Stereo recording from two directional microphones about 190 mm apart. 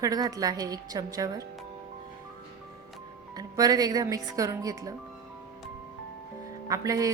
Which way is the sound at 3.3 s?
20° right (ahead or behind).